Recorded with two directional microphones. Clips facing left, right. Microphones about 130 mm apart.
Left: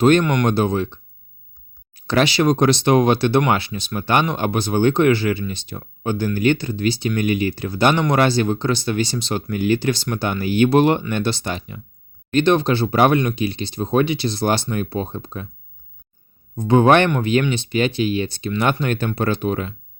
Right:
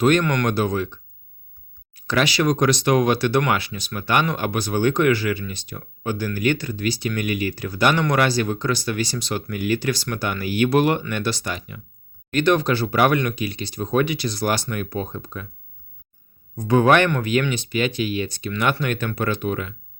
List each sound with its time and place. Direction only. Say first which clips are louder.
0.0 s speech: left 3 dB; 30° left (ahead or behind)
16.6 s speech: left 3 dB; 25° left (ahead or behind)